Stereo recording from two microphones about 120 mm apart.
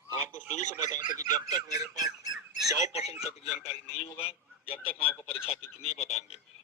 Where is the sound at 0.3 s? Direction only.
90° left.